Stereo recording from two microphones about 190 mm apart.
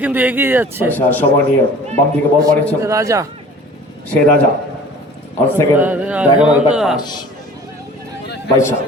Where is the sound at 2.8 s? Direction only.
15° right (ahead or behind).